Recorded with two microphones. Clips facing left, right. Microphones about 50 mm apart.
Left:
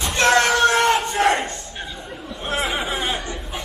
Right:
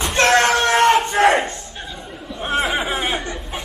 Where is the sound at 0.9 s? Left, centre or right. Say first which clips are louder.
Right 4 dB; centre.